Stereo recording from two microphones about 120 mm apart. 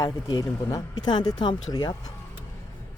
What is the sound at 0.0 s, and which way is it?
A woman's voice, 30° left (ahead or behind).